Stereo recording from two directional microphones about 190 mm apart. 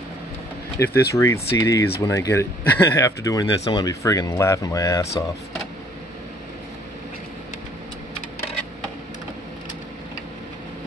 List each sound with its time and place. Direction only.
0.7 s speech: 15° left (ahead or behind)